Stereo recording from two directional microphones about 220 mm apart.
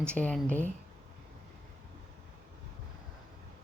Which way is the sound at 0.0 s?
5° left (ahead or behind).